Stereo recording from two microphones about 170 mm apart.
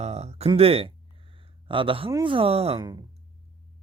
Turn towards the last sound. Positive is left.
turn(degrees=-25)  # may be behind; listen again after turning